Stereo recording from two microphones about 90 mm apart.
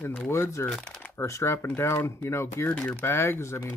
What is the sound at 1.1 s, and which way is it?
Speech, 30° left (ahead or behind).